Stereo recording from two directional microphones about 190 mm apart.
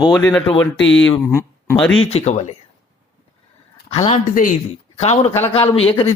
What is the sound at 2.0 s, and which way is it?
Speech, 35° left (ahead or behind).